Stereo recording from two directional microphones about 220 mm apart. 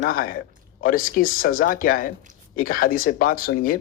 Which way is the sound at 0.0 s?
40° left (ahead or behind).